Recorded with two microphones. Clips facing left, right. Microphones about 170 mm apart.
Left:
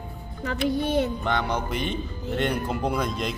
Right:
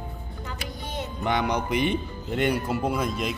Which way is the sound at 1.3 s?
15° right (ahead or behind).